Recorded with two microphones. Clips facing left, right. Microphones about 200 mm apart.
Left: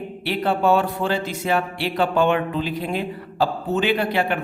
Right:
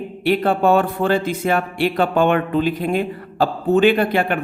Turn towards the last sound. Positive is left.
turn(degrees=-50)  # may be behind; listen again after turning